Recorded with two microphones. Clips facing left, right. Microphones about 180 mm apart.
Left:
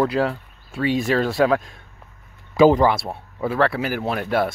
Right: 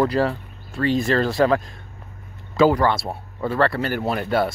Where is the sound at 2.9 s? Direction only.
Centre (ahead or behind).